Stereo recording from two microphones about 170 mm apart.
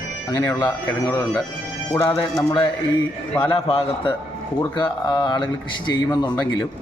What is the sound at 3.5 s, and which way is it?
A man's voice, 30° left (ahead or behind).